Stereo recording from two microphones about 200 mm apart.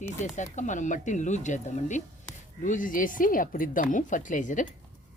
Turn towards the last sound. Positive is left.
turn(degrees=40)  # may be behind; listen again after turning